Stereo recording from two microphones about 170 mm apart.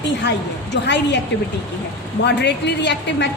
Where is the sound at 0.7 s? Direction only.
90° left.